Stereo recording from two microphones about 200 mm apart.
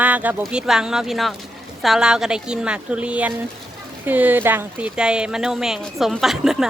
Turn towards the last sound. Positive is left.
turn(degrees=0)  # may be behind; listen again after turning